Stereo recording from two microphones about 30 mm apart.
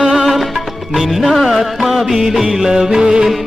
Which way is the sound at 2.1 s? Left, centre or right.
Centre.